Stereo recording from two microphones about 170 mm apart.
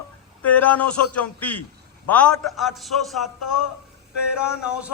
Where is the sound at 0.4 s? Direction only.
10° left (ahead or behind).